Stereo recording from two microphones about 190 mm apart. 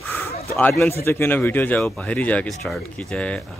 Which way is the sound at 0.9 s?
15° left (ahead or behind).